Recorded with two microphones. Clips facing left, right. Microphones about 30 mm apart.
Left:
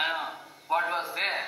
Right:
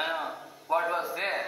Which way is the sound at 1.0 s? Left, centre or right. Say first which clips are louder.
Left 1 dB; left.